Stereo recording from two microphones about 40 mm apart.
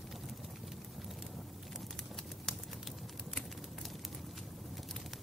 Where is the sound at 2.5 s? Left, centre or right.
Centre.